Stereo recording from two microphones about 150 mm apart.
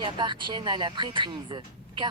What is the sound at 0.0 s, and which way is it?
A woman's voice, 30° right (ahead or behind).